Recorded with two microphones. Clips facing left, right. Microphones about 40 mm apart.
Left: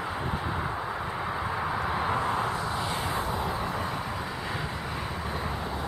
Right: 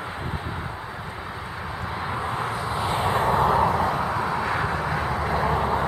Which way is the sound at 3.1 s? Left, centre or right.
Right.